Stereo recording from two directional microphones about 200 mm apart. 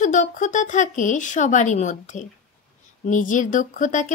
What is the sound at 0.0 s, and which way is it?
Speech, 40° left (ahead or behind).